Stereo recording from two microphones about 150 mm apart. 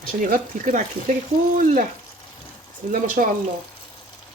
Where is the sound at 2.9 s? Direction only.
65° right (ahead or behind).